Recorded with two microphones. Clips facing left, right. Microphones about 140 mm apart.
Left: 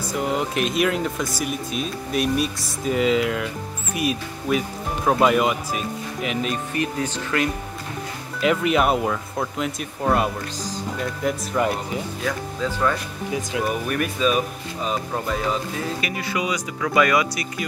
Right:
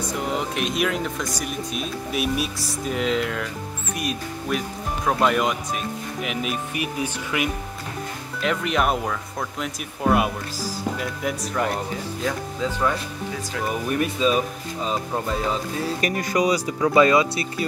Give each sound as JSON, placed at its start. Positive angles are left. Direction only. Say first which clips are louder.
{"t": 0.1, "sound": "speech", "louder": "left 5 dB", "side_deg": 0}
{"t": 8.4, "sound": "speech", "louder": "left 4 dB", "side_deg": 5}
{"t": 13.3, "sound": "speech", "louder": "left 6 dB", "side_deg": 15}
{"t": 13.7, "sound": "speech", "louder": "even", "side_deg": -25}
{"t": 16.0, "sound": "speech", "louder": "right 4 dB", "side_deg": -40}